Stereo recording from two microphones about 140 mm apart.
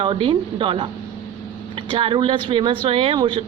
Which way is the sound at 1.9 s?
40° right (ahead or behind).